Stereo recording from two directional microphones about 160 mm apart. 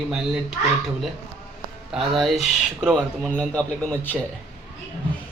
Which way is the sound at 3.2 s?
10° left (ahead or behind).